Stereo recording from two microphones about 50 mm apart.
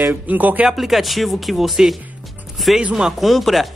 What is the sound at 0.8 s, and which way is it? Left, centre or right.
Speech, centre.